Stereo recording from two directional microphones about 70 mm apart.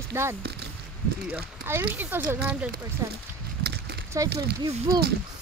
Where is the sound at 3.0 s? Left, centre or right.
Right.